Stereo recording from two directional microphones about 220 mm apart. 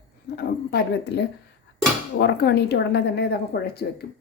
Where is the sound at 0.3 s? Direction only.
45° left (ahead or behind).